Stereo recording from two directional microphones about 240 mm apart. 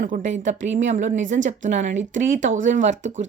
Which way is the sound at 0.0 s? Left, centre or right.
Right.